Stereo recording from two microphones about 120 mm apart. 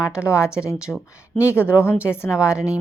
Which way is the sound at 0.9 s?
10° left (ahead or behind).